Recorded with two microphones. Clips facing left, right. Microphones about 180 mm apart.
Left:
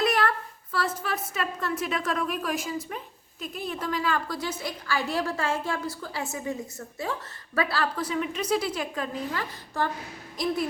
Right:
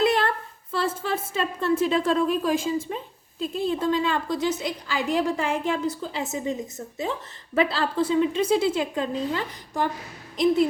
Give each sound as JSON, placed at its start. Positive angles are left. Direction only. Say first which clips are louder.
{"t": 0.0, "sound": "a woman's voice", "louder": "right 3 dB", "side_deg": -25}